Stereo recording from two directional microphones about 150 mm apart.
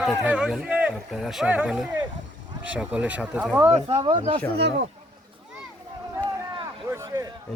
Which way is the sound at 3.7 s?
40° right (ahead or behind).